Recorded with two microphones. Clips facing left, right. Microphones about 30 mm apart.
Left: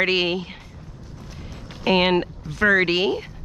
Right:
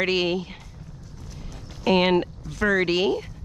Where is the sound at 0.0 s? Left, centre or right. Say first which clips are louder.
Left 2 dB; centre.